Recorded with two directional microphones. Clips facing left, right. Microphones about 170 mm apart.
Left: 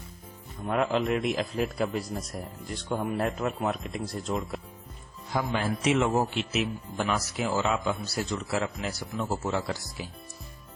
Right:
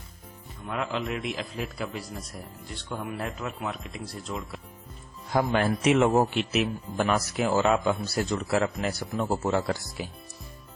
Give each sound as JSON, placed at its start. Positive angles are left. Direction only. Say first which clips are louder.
{"t": 0.6, "sound": "a man's voice", "louder": "left 5 dB", "side_deg": 40}
{"t": 5.3, "sound": "a man's voice", "louder": "right 4 dB", "side_deg": -60}